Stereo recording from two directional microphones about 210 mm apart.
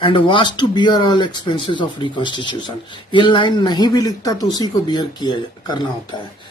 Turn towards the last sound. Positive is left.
turn(degrees=20)  # may be behind; listen again after turning